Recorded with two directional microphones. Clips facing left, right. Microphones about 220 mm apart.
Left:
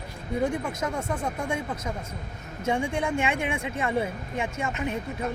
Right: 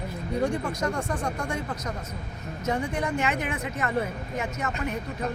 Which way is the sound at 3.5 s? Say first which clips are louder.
Left 1 dB; 10° left (ahead or behind).